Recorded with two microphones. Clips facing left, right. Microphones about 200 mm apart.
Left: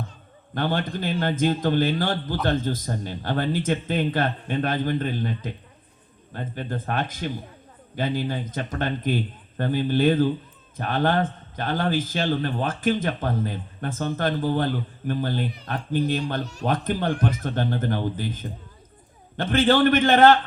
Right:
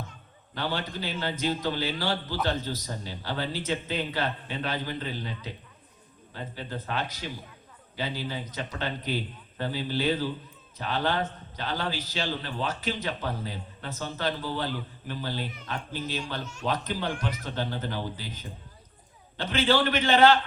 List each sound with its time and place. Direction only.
0.5 s a man's voice: 50° left (ahead or behind)
16.4 s speech: 35° left (ahead or behind)
16.6 s a man's voice: 50° left (ahead or behind)